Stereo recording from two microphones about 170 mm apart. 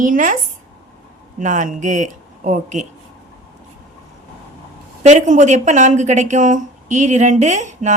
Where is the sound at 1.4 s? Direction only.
45° right (ahead or behind).